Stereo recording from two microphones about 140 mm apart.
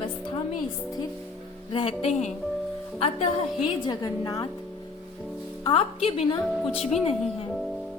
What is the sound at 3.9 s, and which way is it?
Speech, 25° left (ahead or behind).